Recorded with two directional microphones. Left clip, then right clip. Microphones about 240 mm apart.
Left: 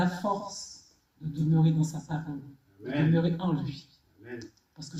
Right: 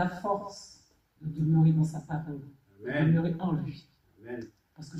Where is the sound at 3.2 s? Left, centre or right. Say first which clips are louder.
Left 3 dB; left.